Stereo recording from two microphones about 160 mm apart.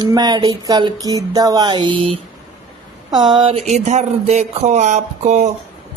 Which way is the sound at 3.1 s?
30° right (ahead or behind).